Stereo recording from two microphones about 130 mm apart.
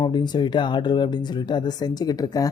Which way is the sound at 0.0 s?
35° left (ahead or behind).